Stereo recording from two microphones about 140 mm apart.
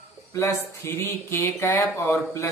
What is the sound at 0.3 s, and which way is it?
Speech, 20° left (ahead or behind).